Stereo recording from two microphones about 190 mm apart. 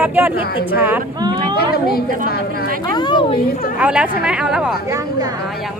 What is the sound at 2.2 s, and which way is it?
Speech, 55° left (ahead or behind).